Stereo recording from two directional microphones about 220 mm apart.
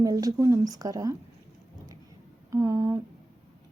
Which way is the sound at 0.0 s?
15° right (ahead or behind).